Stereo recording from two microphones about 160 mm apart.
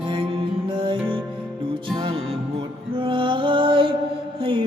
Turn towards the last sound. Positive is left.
turn(degrees=-35)  # may be behind; listen again after turning